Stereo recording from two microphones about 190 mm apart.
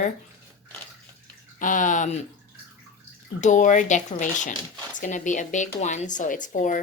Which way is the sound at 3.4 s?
40° left (ahead or behind).